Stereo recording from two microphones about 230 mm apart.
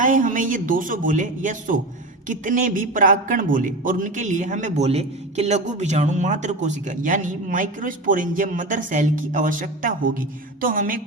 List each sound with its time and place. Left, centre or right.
0.0 s a man's voice: right